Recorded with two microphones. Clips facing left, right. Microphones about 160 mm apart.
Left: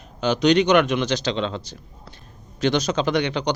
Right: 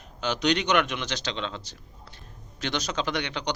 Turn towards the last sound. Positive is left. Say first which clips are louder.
# left 8 dB
turn(degrees=45)  # may be behind; listen again after turning